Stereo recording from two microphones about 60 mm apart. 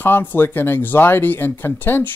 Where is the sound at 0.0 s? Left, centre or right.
Left.